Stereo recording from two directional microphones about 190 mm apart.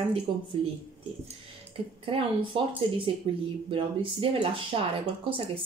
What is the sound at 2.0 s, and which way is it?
A woman's voice, 30° right (ahead or behind).